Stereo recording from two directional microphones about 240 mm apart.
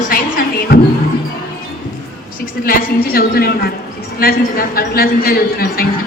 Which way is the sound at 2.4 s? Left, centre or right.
Left.